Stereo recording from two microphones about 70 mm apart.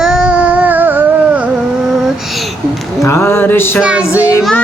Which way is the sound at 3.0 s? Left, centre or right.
Left.